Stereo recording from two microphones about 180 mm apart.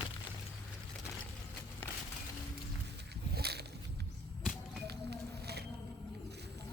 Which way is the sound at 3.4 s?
65° right (ahead or behind).